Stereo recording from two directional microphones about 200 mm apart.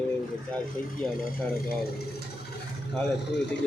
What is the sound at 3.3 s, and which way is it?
Speech, 60° left (ahead or behind).